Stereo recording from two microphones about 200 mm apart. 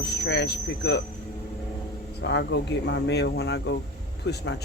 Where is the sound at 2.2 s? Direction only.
60° left (ahead or behind).